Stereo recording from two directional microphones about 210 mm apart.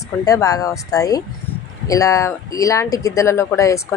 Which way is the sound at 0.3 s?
15° left (ahead or behind).